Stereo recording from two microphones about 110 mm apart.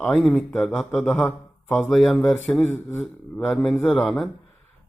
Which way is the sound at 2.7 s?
15° left (ahead or behind).